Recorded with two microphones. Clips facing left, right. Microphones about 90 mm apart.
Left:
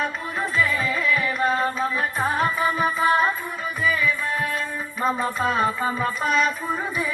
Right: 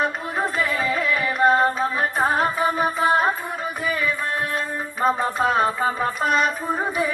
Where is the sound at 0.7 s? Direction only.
35° right (ahead or behind).